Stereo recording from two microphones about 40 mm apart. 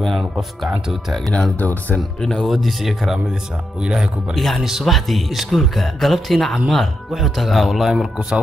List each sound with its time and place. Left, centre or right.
1.6 s speech: left
2.4 s speech: centre
3.8 s speech: centre
4.3 s speech: centre
4.6 s speech: centre
4.8 s speech: centre